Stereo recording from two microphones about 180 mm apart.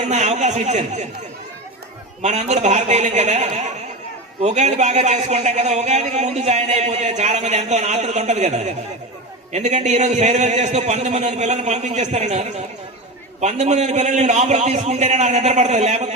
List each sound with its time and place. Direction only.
0.1 s speech: 40° right (ahead or behind)
2.2 s a man's voice: 40° right (ahead or behind)